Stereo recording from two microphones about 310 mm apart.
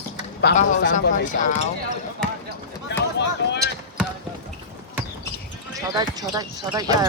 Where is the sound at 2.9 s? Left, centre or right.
Left.